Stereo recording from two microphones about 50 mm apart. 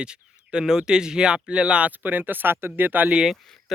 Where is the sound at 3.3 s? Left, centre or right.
Centre.